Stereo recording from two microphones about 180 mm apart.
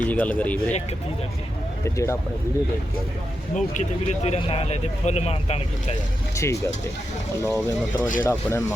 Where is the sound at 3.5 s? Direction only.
45° left (ahead or behind).